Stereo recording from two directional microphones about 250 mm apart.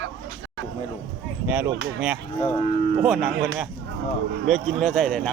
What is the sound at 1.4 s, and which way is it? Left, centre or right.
Speech, centre.